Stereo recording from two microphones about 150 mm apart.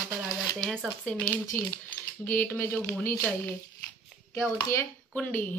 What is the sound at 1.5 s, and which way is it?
Speech, 15° left (ahead or behind).